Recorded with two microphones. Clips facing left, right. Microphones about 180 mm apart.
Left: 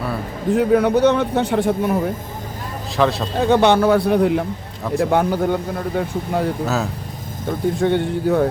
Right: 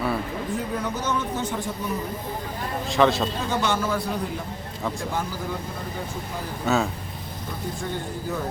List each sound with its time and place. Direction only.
0.5 s a man's voice: 70° left (ahead or behind)
2.9 s a man's voice: centre (ahead or behind)
3.3 s a man's voice: 65° left (ahead or behind)
6.7 s a man's voice: centre (ahead or behind)
7.8 s a man's voice: 70° left (ahead or behind)